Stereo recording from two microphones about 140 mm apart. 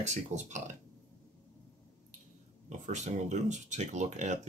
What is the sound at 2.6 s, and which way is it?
Speech, 60° right (ahead or behind).